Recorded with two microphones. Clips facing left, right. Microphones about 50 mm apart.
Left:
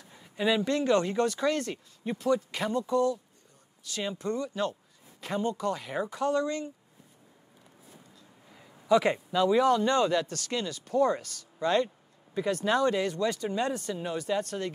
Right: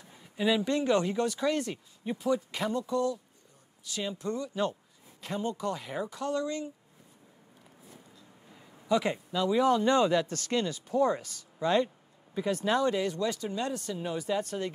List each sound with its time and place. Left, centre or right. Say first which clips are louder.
0.1 s a sound: left 1 dB; centre
0.7 s speech: left 2 dB; centre
2.6 s speech: left 3 dB; centre
5.9 s speech: left 6 dB; centre
8.5 s a sound: left 4 dB; centre
9.3 s speech: left 4 dB; centre
9.6 s speech: right 3 dB; centre
10.2 s speech: right 2 dB; right
10.9 s speech: left 3 dB; centre
13.5 s speech: left 3 dB; centre
14.1 s speech: left 1 dB; centre
14.4 s speech: even; centre